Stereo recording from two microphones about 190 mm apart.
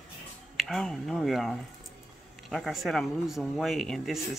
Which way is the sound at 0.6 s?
Centre (ahead or behind).